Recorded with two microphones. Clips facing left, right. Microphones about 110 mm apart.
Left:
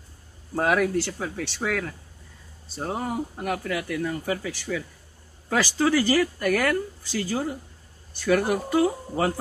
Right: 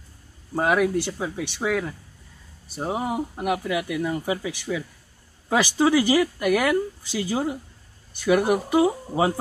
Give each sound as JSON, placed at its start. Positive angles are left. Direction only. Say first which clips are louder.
{"t": 0.6, "sound": "speech", "louder": "right 1 dB", "side_deg": -5}